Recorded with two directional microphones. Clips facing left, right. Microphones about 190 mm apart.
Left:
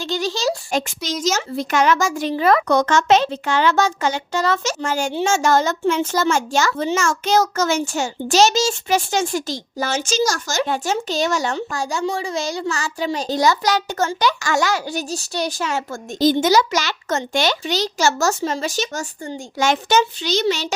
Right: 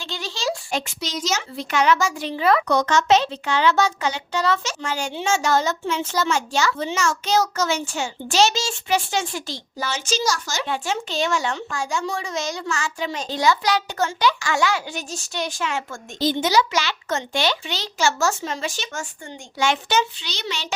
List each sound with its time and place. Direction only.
0.0 s speech: 40° left (ahead or behind)